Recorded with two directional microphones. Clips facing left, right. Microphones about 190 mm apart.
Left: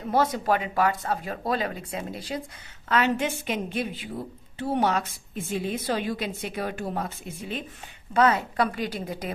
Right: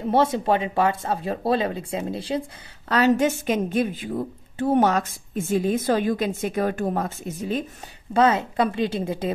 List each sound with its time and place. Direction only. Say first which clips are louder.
0.1 s speech: right 3 dB; 25° right (ahead or behind)
2.9 s a woman's voice: right 5 dB; 40° right (ahead or behind)
8.1 s speech: right 3 dB; 25° right (ahead or behind)